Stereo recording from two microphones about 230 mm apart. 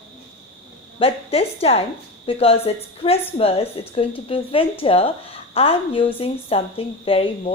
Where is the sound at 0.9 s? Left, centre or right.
Left.